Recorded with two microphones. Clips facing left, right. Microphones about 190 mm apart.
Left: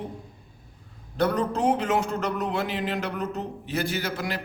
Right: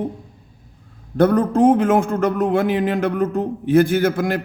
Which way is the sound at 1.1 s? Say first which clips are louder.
Right 9 dB; 50° right (ahead or behind).